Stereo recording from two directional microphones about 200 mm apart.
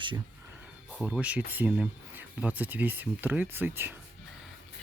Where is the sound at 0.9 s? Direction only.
5° right (ahead or behind).